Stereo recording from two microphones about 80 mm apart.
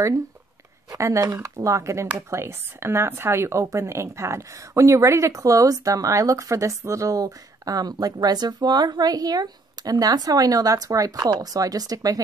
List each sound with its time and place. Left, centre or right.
0.9 s speech: right